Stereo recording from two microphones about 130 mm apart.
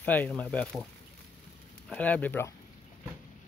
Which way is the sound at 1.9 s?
10° left (ahead or behind).